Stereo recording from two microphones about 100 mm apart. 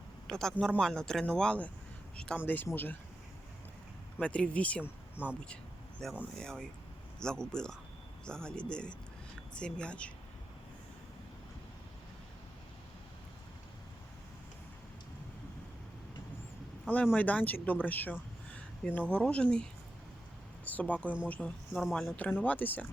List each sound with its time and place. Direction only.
0.3 s a man's voice: 5° left (ahead or behind)
2.4 s speech: 20° left (ahead or behind)
4.2 s speech: 10° left (ahead or behind)
6.0 s speech: 5° left (ahead or behind)
17.2 s speech: 15° left (ahead or behind)
20.7 s speech: 15° left (ahead or behind)
21.7 s speech: 5° right (ahead or behind)
22.1 s speech: 15° left (ahead or behind)